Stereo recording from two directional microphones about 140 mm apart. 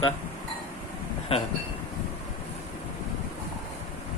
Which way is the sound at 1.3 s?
40° left (ahead or behind).